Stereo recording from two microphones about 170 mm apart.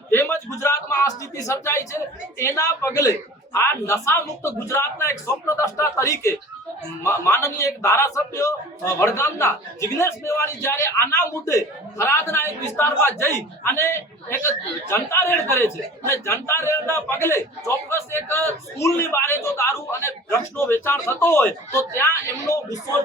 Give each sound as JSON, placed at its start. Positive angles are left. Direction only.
{"t": 0.1, "sound": "a man's voice", "side_deg": 15}